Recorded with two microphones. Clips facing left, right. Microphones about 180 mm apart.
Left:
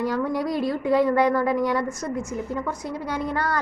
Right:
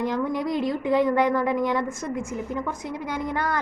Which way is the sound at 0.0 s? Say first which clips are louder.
Left 1 dB; 20° right (ahead or behind).